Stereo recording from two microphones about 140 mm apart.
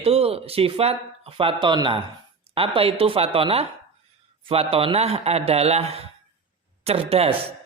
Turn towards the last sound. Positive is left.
turn(degrees=-45)  # may be behind; listen again after turning